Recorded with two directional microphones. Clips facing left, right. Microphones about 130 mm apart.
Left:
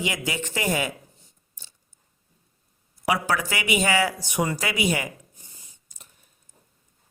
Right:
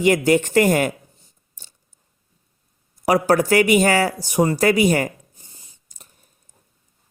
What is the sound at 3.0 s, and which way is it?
Speech, 40° right (ahead or behind).